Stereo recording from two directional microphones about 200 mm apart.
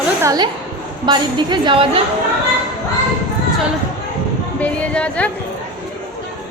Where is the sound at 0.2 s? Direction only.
20° right (ahead or behind).